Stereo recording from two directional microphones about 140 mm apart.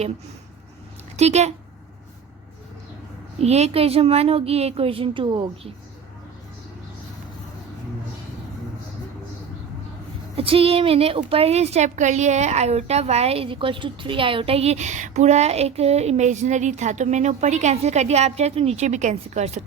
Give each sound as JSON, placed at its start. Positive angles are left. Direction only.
{"t": 1.1, "sound": "speech", "side_deg": -55}
{"t": 3.4, "sound": "a woman's voice", "side_deg": -50}
{"t": 10.3, "sound": "a woman's voice", "side_deg": -40}